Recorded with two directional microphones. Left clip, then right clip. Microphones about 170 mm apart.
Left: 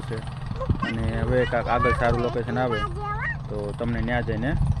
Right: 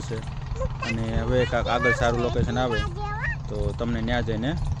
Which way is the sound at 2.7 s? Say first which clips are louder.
Left 1 dB; 25° right (ahead or behind).